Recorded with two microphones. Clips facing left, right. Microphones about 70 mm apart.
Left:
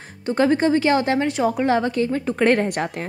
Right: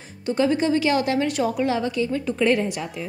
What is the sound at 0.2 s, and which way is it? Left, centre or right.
A woman's voice, left.